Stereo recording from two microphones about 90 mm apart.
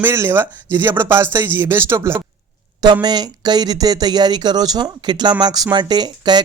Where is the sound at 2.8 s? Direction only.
50° right (ahead or behind).